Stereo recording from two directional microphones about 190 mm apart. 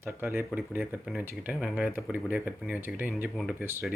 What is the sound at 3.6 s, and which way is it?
Speech, 10° right (ahead or behind).